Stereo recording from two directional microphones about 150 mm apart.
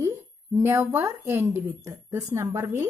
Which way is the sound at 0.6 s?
15° right (ahead or behind).